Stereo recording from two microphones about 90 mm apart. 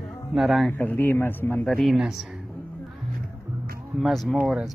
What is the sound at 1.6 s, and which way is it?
Speech, 5° left (ahead or behind).